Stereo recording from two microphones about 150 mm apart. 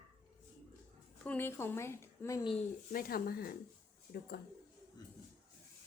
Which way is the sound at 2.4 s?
40° left (ahead or behind).